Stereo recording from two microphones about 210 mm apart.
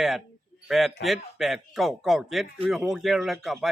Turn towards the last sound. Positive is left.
turn(degrees=0)  # may be behind; listen again after turning